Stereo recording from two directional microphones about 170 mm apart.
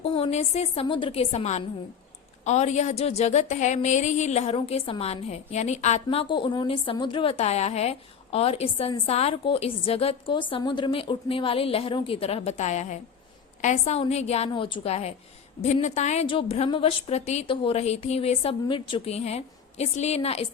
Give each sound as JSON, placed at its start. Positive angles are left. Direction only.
{"t": 0.0, "sound": "a woman's voice", "side_deg": 35}